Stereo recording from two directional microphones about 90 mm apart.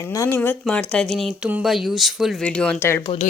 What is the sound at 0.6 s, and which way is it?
Speech, 10° left (ahead or behind).